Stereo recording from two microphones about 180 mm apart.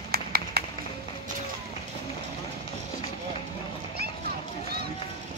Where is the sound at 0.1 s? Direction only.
60° right (ahead or behind).